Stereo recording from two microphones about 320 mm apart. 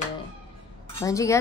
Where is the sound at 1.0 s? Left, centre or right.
Centre.